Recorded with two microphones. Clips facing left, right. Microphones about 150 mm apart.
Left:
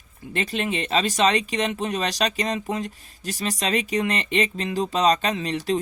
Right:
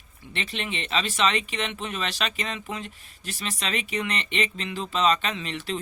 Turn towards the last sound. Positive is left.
turn(degrees=40)  # may be behind; listen again after turning